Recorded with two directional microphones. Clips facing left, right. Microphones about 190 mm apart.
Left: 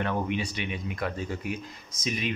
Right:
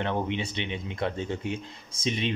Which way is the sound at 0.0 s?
25° right (ahead or behind).